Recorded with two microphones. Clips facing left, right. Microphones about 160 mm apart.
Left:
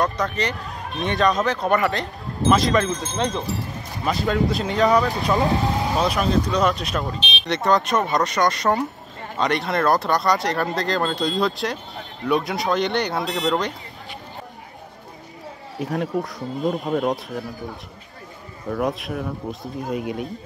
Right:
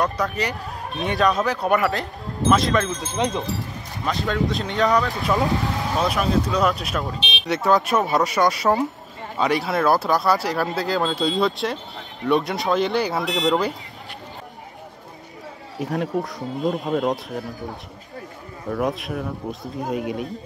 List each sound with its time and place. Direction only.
0.0 s speech: 5° right (ahead or behind)
3.2 s speech: 20° right (ahead or behind)
4.0 s speech: 5° left (ahead or behind)
15.8 s speech: centre (ahead or behind)
18.7 s speech: centre (ahead or behind)